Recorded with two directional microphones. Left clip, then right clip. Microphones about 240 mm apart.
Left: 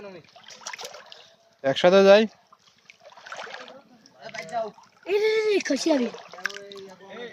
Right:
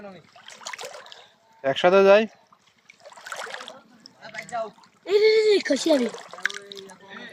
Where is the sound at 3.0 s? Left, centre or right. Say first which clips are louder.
Right 3 dB; right.